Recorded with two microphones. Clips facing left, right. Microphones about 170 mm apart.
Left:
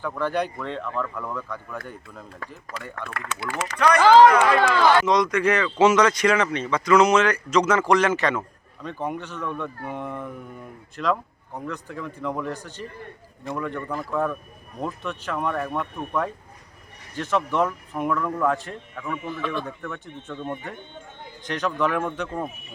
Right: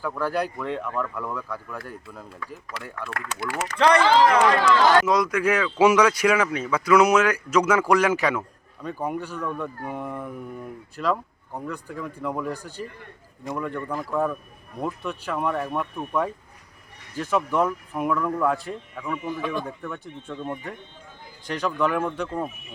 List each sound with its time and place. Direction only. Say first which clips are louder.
0.0 s speech: left 1 dB; 5° right (ahead or behind)
3.2 s speech: even; 45° right (ahead or behind)
3.8 s speech: left 3 dB; 30° right (ahead or behind)
5.0 s speech: left 1 dB; 5° right (ahead or behind)